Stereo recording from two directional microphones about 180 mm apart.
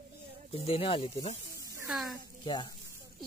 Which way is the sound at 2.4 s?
25° left (ahead or behind).